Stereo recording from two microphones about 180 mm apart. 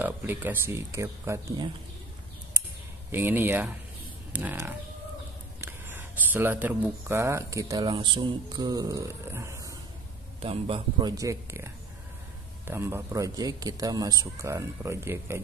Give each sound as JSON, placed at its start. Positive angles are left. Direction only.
{"t": 0.0, "sound": "a man's voice", "side_deg": -10}
{"t": 3.1, "sound": "a man's voice", "side_deg": -10}
{"t": 10.4, "sound": "a man's voice", "side_deg": -30}